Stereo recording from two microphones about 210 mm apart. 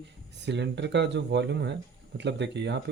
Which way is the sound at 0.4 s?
55° right (ahead or behind).